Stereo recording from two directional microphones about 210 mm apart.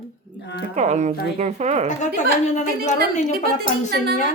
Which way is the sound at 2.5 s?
35° left (ahead or behind).